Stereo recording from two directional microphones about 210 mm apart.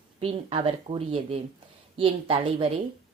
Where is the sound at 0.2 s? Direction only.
25° right (ahead or behind).